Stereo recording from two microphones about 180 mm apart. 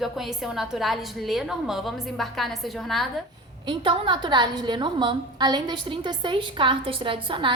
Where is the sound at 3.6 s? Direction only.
30° right (ahead or behind).